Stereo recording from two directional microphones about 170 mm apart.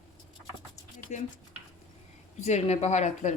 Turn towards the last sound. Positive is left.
turn(degrees=45)  # may be behind; listen again after turning